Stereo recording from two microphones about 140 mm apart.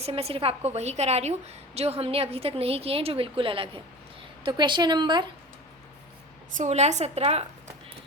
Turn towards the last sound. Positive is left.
turn(degrees=-50)  # may be behind; listen again after turning